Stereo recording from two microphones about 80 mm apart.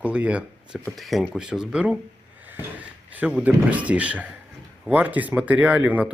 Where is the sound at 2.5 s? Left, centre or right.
Right.